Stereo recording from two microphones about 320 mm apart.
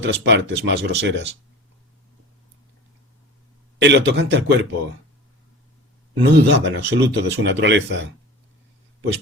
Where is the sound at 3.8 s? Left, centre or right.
Right.